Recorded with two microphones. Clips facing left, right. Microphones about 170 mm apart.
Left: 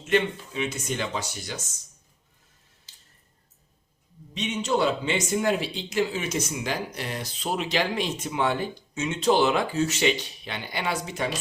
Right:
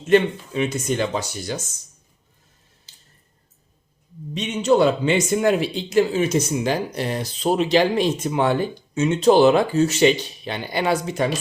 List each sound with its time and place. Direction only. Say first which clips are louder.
0.1 s speech: right 7 dB; 45° right (ahead or behind)
4.4 s speech: right 7 dB; 45° right (ahead or behind)